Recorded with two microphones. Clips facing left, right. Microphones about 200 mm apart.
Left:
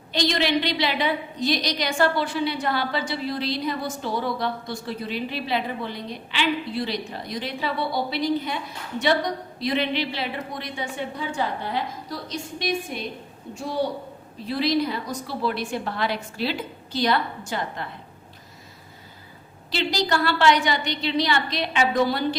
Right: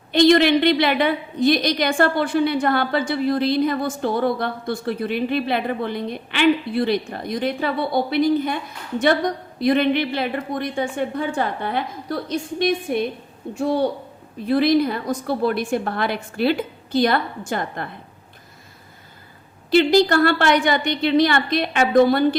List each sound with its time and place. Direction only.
0.1 s a woman's voice: 55° right (ahead or behind)
19.7 s a woman's voice: 55° right (ahead or behind)